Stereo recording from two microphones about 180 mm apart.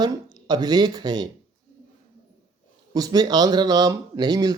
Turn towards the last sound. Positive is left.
turn(degrees=-20)  # may be behind; listen again after turning